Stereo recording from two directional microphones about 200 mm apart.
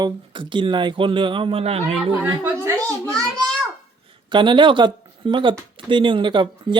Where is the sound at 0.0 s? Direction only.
25° right (ahead or behind).